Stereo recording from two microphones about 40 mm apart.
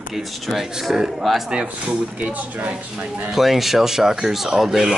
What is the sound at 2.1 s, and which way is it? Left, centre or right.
Speech, right.